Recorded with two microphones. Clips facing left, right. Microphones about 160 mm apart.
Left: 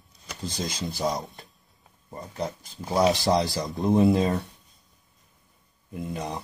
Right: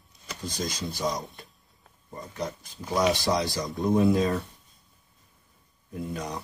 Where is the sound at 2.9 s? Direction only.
30° left (ahead or behind).